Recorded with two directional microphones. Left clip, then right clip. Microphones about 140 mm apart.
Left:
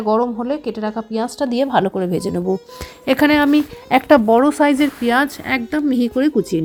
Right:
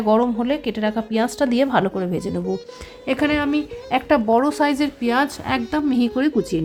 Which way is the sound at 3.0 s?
50° left (ahead or behind).